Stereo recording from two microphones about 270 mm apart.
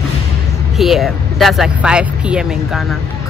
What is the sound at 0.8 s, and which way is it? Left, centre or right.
Speech, centre.